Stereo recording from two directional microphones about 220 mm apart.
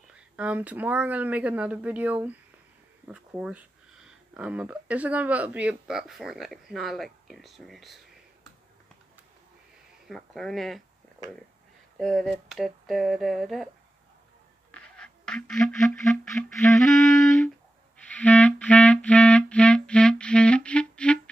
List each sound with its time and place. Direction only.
0.1 s speech: 5° right (ahead or behind)
10.0 s speech: centre (ahead or behind)
12.0 s speech: 5° left (ahead or behind)
14.7 s a sound: 5° left (ahead or behind)
17.9 s clarinet: 5° left (ahead or behind)